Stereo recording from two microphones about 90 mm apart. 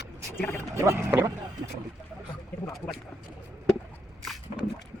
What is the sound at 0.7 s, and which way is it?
Speech, 30° right (ahead or behind).